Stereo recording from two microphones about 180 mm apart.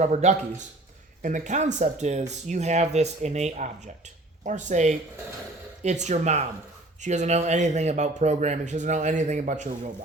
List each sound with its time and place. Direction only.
0.0 s speech: 40° right (ahead or behind)